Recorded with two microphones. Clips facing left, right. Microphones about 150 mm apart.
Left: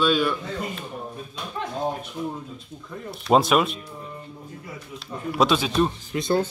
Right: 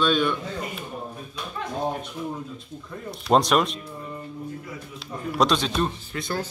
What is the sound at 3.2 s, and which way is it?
Speech, 5° left (ahead or behind).